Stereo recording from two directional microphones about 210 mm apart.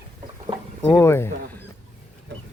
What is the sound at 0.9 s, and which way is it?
Speech, 15° left (ahead or behind).